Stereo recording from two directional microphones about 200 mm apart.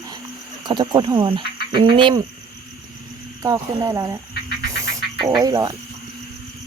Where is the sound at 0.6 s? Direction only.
20° right (ahead or behind).